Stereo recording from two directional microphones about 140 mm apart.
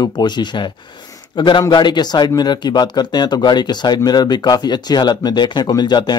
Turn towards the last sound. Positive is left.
turn(degrees=30)  # may be behind; listen again after turning